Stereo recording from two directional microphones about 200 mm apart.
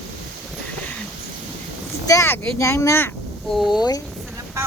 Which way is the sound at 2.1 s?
15° left (ahead or behind).